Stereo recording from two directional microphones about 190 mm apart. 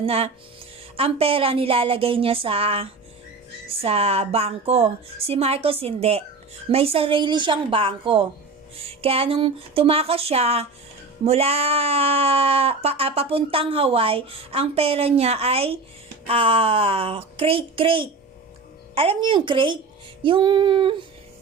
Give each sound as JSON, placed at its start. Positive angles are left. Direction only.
{"t": 0.0, "sound": "a woman's voice", "side_deg": -30}